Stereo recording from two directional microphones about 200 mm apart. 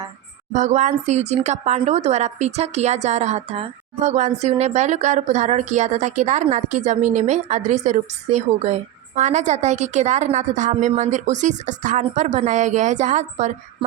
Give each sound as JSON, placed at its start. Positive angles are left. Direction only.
{"t": 0.5, "sound": "speech", "side_deg": -40}